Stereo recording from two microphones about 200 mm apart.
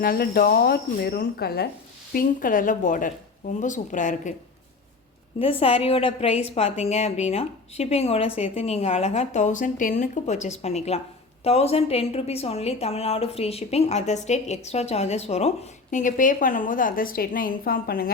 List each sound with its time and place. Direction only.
0.0 s a woman's voice: 50° left (ahead or behind)
5.4 s a woman's voice: 30° left (ahead or behind); by 18.1 s 45° left (ahead or behind)